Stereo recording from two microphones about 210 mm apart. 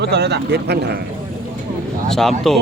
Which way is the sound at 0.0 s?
50° right (ahead or behind).